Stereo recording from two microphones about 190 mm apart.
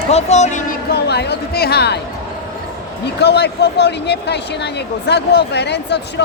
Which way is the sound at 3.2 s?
60° left (ahead or behind).